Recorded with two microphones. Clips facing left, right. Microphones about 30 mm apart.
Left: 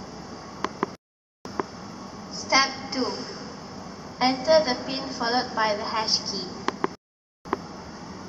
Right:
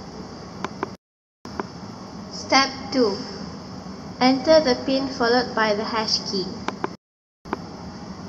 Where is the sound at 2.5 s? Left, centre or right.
Centre.